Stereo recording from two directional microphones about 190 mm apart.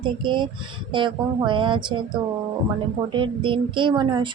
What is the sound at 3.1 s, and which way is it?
A woman's voice, 25° right (ahead or behind).